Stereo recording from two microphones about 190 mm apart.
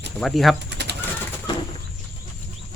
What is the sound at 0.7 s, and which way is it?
Bird, 65° right (ahead or behind).